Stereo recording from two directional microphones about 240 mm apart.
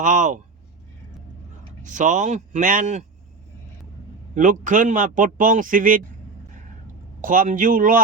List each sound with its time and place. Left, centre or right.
0.0 s speech: right
1.8 s speech: right
4.4 s speech: right
7.2 s speech: right